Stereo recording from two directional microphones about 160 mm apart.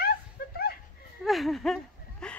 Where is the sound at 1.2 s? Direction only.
Centre (ahead or behind).